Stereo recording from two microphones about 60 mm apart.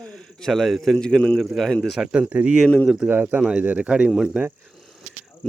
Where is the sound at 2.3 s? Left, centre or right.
Right.